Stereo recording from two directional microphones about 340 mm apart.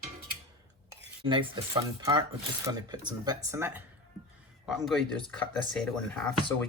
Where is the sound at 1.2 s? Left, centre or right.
Centre.